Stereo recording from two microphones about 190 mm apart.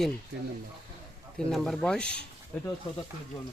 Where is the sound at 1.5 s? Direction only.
Centre (ahead or behind).